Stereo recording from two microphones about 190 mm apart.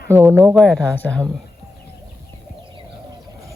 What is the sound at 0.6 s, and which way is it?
Speech, 5° left (ahead or behind).